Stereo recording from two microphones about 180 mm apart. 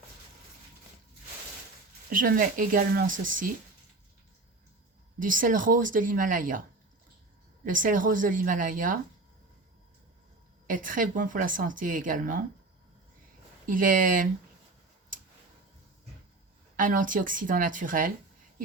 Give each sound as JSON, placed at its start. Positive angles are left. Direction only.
{"t": 2.0, "sound": "speech", "side_deg": -50}
{"t": 5.2, "sound": "speech", "side_deg": -50}
{"t": 7.6, "sound": "speech", "side_deg": -45}
{"t": 10.7, "sound": "speech", "side_deg": -50}
{"t": 13.7, "sound": "speech", "side_deg": -50}
{"t": 16.7, "sound": "speech", "side_deg": -50}